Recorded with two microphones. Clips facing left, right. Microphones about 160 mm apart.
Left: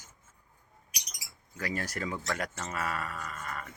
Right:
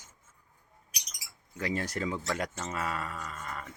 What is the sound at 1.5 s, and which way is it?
Speech, 25° right (ahead or behind).